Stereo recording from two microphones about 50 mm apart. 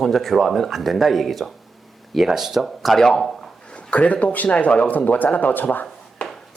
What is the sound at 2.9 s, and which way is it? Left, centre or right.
Speech, centre.